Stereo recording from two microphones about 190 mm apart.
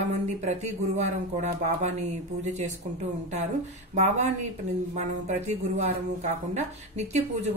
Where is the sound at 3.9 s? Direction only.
35° right (ahead or behind).